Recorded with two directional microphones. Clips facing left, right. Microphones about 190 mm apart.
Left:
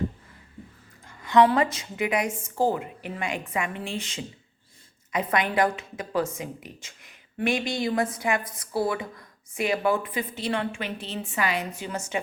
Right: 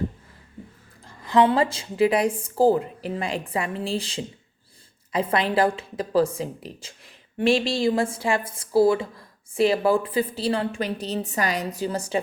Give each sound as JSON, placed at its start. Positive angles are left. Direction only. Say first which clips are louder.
{"t": 1.0, "sound": "a woman's voice", "louder": "even", "side_deg": -30}